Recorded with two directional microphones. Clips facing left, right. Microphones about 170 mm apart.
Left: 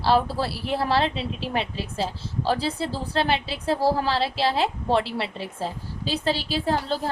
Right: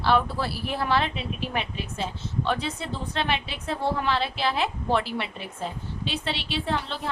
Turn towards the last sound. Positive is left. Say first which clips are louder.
# left 4 dB
turn(degrees=35)  # may be behind; listen again after turning